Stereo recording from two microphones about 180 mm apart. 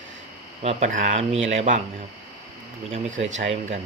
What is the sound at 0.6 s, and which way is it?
Speech, 45° right (ahead or behind).